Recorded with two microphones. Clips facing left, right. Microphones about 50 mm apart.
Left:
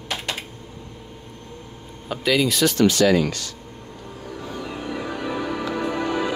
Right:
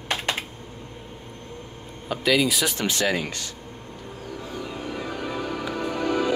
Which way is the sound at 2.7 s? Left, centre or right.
Right.